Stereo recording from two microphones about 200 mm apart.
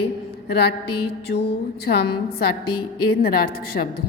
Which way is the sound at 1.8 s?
50° left (ahead or behind).